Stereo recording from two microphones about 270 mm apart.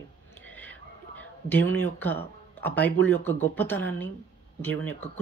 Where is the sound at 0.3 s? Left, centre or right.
Centre.